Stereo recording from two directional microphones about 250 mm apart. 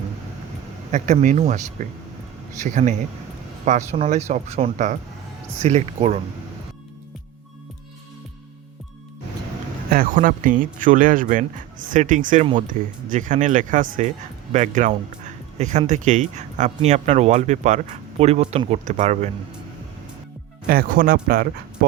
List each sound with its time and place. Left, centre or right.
0.9 s speech: right
9.9 s speech: right
20.7 s speech: right